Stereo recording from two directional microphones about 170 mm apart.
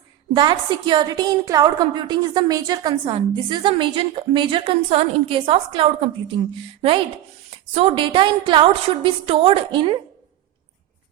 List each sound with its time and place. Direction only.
0.3 s a woman's voice: 25° right (ahead or behind)
7.7 s a woman's voice: 35° right (ahead or behind)